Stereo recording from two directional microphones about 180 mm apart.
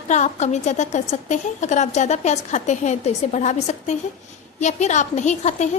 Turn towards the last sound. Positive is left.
turn(degrees=40)  # may be behind; listen again after turning